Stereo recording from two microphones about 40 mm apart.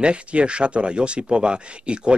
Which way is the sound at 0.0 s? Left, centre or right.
Right.